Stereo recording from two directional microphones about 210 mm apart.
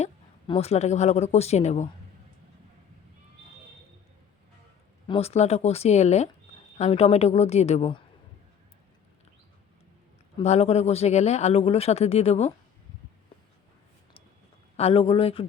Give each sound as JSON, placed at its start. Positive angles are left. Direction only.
{"t": 0.0, "sound": "speech", "side_deg": 25}
{"t": 5.0, "sound": "speech", "side_deg": 25}
{"t": 10.3, "sound": "speech", "side_deg": 30}
{"t": 14.8, "sound": "speech", "side_deg": 25}